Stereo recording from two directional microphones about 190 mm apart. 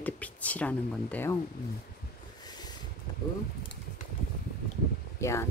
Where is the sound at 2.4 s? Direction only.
20° left (ahead or behind).